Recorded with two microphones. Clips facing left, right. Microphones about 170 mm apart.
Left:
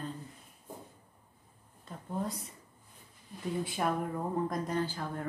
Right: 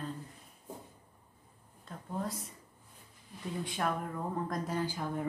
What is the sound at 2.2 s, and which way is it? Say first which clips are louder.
Speech: even; centre (ahead or behind).